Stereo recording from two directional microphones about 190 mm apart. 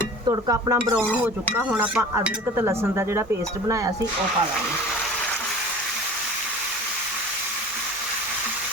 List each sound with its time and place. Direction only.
0.3 s stir: 20° right (ahead or behind)
1.1 s dishes: 10° right (ahead or behind)